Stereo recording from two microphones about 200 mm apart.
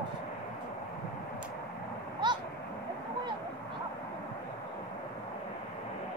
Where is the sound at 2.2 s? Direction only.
20° right (ahead or behind).